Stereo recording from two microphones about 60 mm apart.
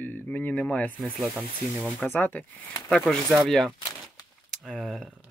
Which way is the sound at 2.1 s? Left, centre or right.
Left.